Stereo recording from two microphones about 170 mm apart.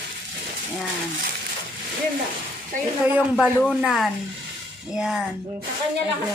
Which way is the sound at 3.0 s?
5° right (ahead or behind).